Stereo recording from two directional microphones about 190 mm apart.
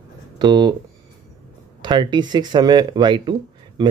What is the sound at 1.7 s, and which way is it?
Speech, 25° right (ahead or behind).